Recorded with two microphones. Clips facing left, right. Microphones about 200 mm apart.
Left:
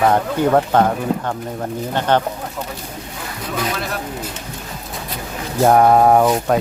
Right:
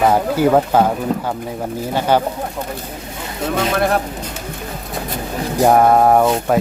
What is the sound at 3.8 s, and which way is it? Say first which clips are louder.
Speech: right 9 dB; 55° right (ahead or behind).